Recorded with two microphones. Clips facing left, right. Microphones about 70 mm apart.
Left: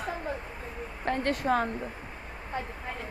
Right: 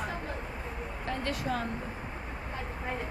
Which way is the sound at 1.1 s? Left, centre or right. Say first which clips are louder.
Left 6 dB; left.